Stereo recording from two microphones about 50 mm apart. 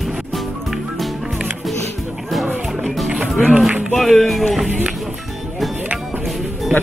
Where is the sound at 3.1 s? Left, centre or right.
Centre.